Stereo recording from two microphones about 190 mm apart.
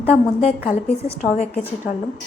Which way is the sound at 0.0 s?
35° left (ahead or behind).